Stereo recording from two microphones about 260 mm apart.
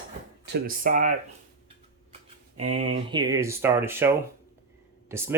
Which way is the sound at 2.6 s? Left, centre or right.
Right.